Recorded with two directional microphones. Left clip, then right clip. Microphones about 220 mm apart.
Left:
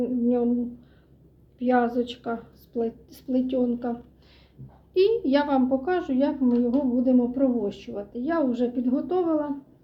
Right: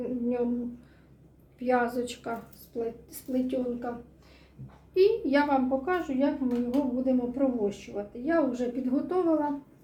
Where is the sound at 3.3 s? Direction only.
35° left (ahead or behind).